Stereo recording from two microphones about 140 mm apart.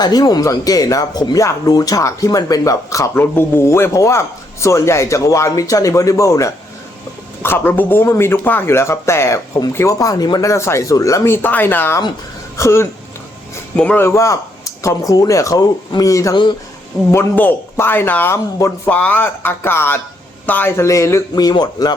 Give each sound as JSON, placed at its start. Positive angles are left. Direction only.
{"t": 0.0, "sound": "speech", "side_deg": 30}